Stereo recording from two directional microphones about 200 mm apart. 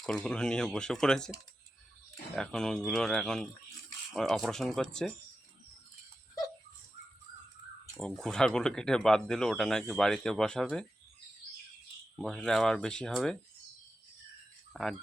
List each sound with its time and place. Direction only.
0.0 s speech: 5° left (ahead or behind)
2.3 s speech: 5° left (ahead or behind)
7.9 s speech: centre (ahead or behind)
12.1 s speech: centre (ahead or behind)
14.7 s speech: centre (ahead or behind)